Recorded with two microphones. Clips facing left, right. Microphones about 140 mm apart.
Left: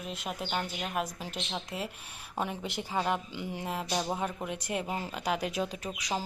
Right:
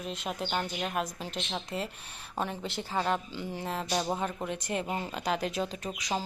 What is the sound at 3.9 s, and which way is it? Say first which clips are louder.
Speech: right 2 dB; centre (ahead or behind).